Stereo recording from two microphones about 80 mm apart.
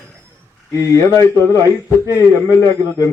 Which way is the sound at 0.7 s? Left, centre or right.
Left.